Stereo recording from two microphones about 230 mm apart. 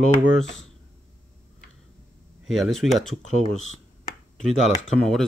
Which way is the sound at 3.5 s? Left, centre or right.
Right.